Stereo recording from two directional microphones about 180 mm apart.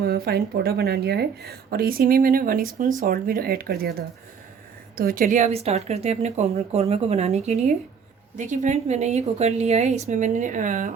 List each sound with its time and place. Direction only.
0.0 s speech: 60° right (ahead or behind)
4.9 s speech: 50° right (ahead or behind)